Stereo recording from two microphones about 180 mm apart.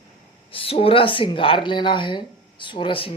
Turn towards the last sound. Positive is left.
turn(degrees=30)  # may be behind; listen again after turning